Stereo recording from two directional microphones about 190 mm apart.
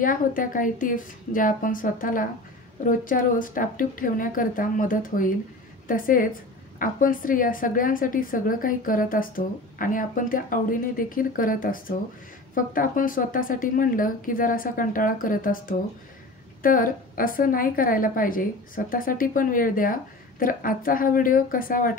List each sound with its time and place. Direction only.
0.0 s a woman's voice: 45° left (ahead or behind)